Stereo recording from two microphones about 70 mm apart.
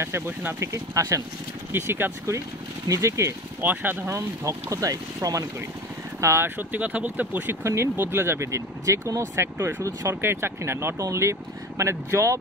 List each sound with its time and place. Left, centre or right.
0.6 s speech: right
1.7 s speech: right
2.9 s speech: right
3.6 s speech: right
4.1 s speech: right
6.2 s speech: right
6.7 s speech: right
7.6 s speech: right